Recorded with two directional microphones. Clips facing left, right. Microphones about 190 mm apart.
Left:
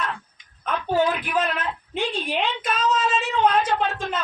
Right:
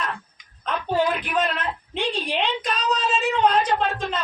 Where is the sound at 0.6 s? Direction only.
5° left (ahead or behind).